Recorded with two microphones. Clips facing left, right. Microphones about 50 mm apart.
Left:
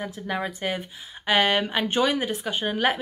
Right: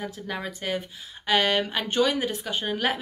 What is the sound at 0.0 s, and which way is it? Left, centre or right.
Speech, centre.